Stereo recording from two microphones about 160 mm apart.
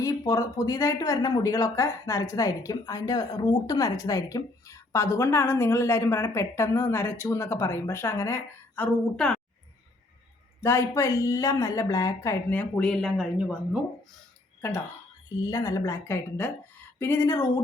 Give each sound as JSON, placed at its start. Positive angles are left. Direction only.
{"t": 0.0, "sound": "speech", "side_deg": 20}
{"t": 10.6, "sound": "speech", "side_deg": 15}
{"t": 15.4, "sound": "speech", "side_deg": 20}